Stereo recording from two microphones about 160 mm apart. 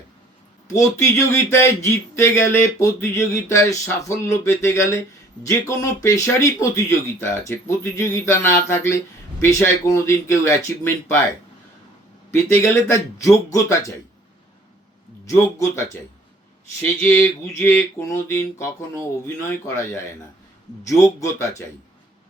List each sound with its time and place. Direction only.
0.7 s speech: 20° left (ahead or behind)
12.3 s speech: 20° left (ahead or behind)
15.3 s speech: 20° left (ahead or behind)
17.0 s speech: 15° left (ahead or behind)